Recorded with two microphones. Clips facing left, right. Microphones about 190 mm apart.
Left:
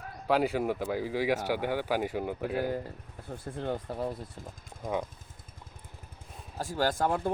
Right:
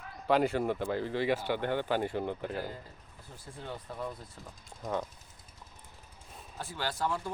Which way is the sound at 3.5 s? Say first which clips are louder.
Left 8 dB; 50° left (ahead or behind).